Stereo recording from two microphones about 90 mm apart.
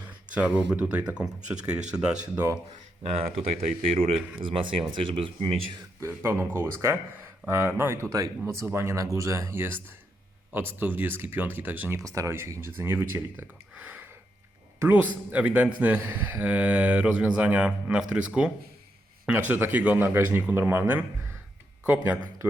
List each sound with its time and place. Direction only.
0.1 s speech: 15° right (ahead or behind)
3.8 s speech: 90° right; by 5.8 s 70° right (ahead or behind)
6.0 s speech: 25° right (ahead or behind)
11.9 s speech: 40° right (ahead or behind); by 22.2 s 15° right (ahead or behind)